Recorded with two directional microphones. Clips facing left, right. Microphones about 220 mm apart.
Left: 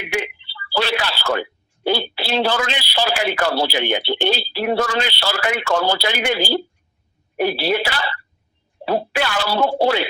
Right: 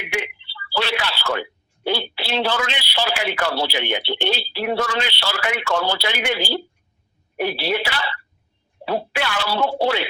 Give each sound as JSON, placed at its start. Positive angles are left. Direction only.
{"t": 0.1, "sound": "speech", "side_deg": 40}